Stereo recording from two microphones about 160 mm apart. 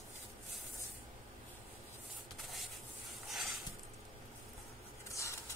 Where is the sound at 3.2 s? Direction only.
Centre (ahead or behind).